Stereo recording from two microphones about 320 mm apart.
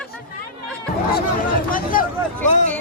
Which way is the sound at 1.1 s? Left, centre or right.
Left.